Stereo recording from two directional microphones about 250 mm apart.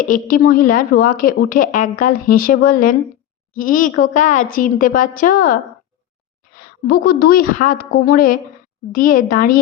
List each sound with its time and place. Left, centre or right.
0.0 s a woman's voice: left